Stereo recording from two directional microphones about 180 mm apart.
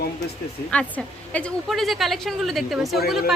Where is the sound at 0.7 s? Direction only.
5° left (ahead or behind).